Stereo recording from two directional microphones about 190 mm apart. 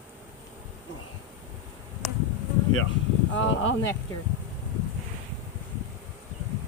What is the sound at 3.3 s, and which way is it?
Speech, 85° left.